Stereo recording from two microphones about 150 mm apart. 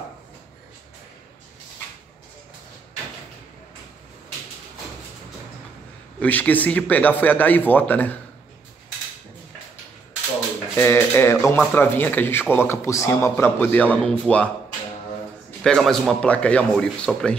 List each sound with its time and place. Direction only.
6.1 s a man's voice: 10° left (ahead or behind)
10.8 s a man's voice: 15° left (ahead or behind)
15.6 s a man's voice: 5° left (ahead or behind)